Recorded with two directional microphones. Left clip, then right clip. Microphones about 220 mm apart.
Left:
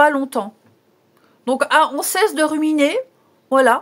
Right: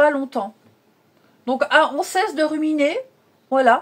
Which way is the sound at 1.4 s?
45° left (ahead or behind).